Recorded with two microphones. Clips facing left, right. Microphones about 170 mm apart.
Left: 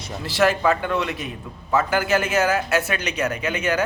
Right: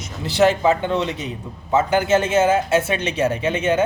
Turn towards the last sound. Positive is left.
turn(degrees=-25)  # may be behind; listen again after turning